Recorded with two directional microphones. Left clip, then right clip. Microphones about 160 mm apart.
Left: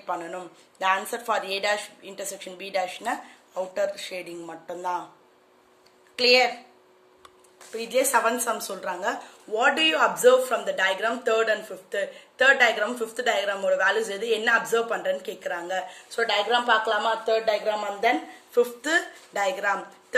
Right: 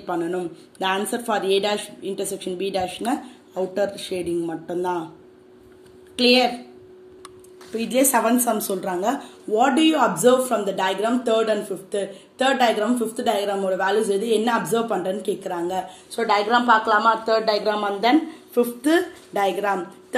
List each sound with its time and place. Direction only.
0.0 s a woman's voice: centre (ahead or behind)
6.1 s a woman's voice: centre (ahead or behind)
7.7 s a woman's voice: centre (ahead or behind)
16.5 s speech: 25° left (ahead or behind)
18.9 s speech: 25° left (ahead or behind)